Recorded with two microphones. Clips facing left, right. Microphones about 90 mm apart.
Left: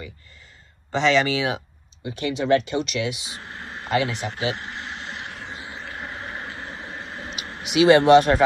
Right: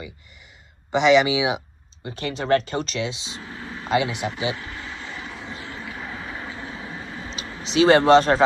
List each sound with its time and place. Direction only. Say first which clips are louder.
0.9 s speech: right 3 dB; 15° right (ahead or behind)
2.0 s speech: left 1 dB; 35° right (ahead or behind); by 4.3 s 20° right (ahead or behind)
5.2 s vehicle: even; 65° left (ahead or behind)
5.5 s vehicle: right 1 dB; 25° left (ahead or behind)
6.5 s vehicle: right 1 dB; 35° left (ahead or behind)
6.9 s vehicle: even; 50° left (ahead or behind)
7.6 s speech: left 1 dB; 35° right (ahead or behind)